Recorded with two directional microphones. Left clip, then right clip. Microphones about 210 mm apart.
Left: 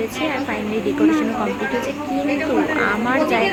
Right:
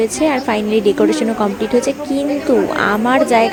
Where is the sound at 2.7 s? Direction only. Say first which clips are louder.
Right 5 dB; 40° right (ahead or behind).